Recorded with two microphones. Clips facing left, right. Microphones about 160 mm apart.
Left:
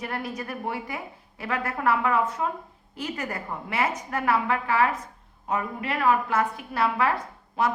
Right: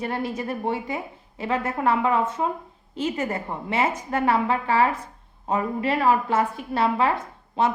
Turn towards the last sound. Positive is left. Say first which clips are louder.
# right 3 dB
turn(degrees=-25)  # may be behind; listen again after turning